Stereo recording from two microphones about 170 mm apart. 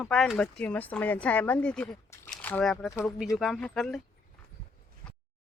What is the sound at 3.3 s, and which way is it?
Speech, centre (ahead or behind).